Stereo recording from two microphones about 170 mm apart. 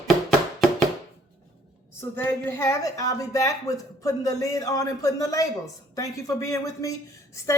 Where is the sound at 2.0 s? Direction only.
15° left (ahead or behind).